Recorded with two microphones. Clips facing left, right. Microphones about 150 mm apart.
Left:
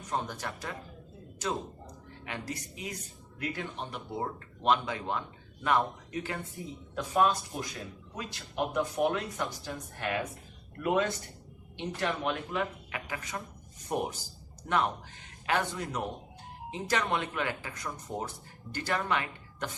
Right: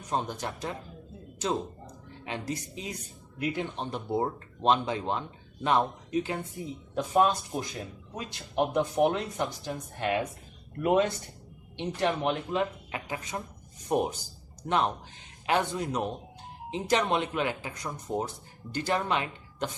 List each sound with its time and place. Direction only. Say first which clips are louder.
0.1 s speech: right 3 dB; 20° right (ahead or behind)
3.8 s speech: right 6 dB; 30° right (ahead or behind)
15.4 s speech: right 3 dB; 25° right (ahead or behind)